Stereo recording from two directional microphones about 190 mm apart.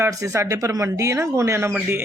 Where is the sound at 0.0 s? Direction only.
15° right (ahead or behind).